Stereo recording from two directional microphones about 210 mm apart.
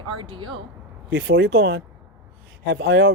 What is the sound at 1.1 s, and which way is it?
Speech, 60° right (ahead or behind).